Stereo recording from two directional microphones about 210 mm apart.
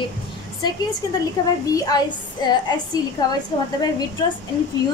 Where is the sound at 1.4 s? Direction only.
15° left (ahead or behind).